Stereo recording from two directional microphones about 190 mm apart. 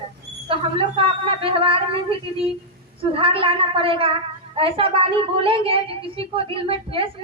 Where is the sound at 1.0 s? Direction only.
30° right (ahead or behind).